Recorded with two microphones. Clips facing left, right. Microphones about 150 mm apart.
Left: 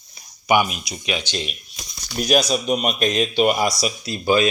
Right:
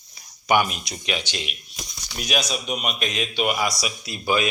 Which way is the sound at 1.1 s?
20° left (ahead or behind).